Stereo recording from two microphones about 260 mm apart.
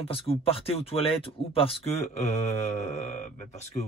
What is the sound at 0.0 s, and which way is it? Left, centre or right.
Speech, left.